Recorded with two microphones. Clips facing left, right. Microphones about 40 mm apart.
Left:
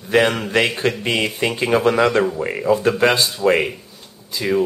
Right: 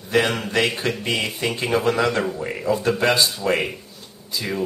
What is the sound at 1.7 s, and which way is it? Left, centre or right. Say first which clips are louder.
Speech: left 4 dB; centre.